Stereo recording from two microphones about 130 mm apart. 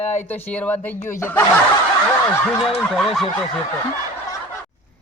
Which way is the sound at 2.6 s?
Centre (ahead or behind).